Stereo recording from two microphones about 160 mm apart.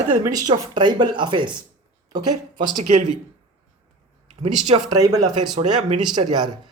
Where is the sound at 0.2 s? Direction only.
20° right (ahead or behind).